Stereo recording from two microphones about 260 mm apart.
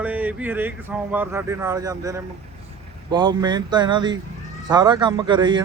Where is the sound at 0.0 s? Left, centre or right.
Centre.